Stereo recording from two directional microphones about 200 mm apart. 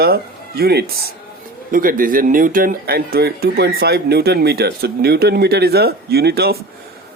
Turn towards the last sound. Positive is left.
turn(degrees=-50)  # may be behind; listen again after turning